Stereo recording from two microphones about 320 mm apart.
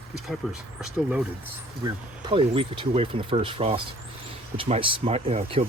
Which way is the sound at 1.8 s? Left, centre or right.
Centre.